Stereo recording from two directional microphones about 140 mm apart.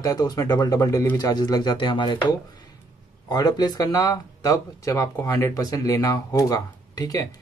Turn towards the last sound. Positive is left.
turn(degrees=25)  # may be behind; listen again after turning